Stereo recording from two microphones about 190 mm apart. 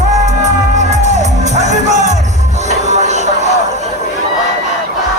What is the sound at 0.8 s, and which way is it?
Music, 35° right (ahead or behind).